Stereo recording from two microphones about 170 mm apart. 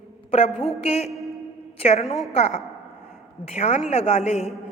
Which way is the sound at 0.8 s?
40° left (ahead or behind).